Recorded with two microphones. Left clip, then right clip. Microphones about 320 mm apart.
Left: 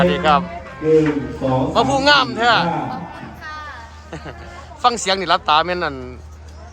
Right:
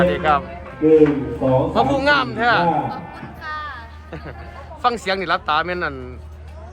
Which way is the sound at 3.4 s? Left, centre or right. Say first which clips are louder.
Right 4 dB; centre.